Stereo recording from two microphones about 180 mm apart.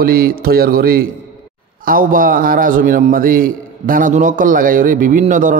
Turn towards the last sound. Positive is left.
turn(degrees=-45)  # may be behind; listen again after turning